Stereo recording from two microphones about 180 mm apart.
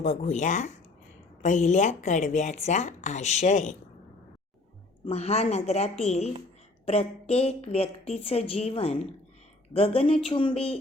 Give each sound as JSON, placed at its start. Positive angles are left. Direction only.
{"t": 0.0, "sound": "a woman's voice", "side_deg": 40}
{"t": 5.0, "sound": "a woman's voice", "side_deg": 35}